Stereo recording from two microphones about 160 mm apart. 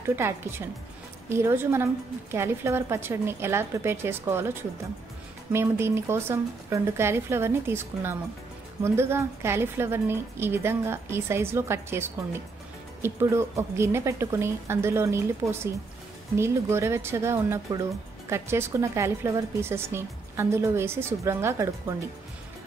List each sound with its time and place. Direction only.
0.0 s a woman's voice: 15° right (ahead or behind)
5.5 s a woman's voice: 15° right (ahead or behind)